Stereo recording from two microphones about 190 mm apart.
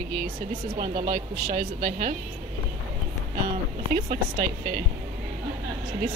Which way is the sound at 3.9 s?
45° right (ahead or behind).